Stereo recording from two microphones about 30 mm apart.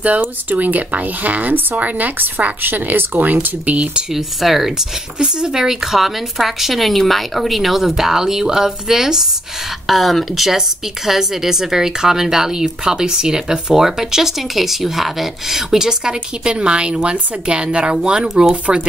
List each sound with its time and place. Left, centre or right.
0.2 s speech: right
1.8 s speech: right
3.4 s speech: right
4.1 s speech: centre
5.2 s speech: right
9.8 s speech: centre; by 18.8 s right